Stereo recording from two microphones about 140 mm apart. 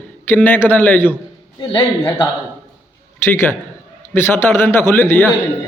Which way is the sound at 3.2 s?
15° left (ahead or behind).